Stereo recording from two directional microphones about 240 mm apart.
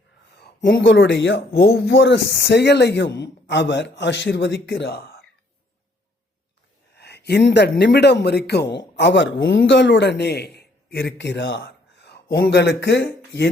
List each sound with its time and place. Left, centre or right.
0.3 s speech: left
6.9 s a man's voice: left